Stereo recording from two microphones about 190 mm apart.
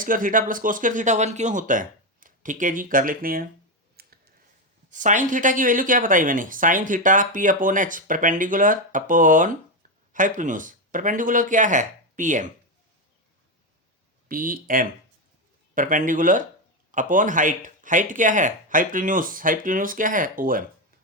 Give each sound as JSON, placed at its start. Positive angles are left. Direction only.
{"t": 0.0, "sound": "speech", "side_deg": -45}
{"t": 4.0, "sound": "clicking", "side_deg": -55}
{"t": 4.9, "sound": "speech", "side_deg": -40}
{"t": 14.3, "sound": "speech", "side_deg": -50}